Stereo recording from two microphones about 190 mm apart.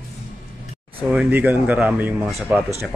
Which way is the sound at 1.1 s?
10° right (ahead or behind).